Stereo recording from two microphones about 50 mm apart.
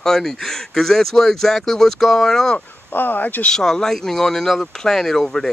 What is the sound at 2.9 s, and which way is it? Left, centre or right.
Speech, left.